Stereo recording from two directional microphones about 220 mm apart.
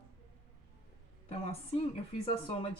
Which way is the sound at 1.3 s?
30° left (ahead or behind).